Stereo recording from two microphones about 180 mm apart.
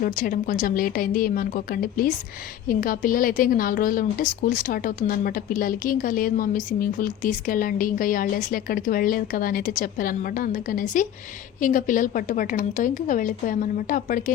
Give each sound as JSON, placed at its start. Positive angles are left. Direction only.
{"t": 0.0, "sound": "a woman's voice", "side_deg": 50}